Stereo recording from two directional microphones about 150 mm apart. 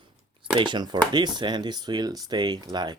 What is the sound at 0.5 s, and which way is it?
Speech, 30° right (ahead or behind).